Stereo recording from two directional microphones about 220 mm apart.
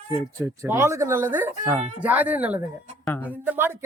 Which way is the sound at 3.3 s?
10° right (ahead or behind).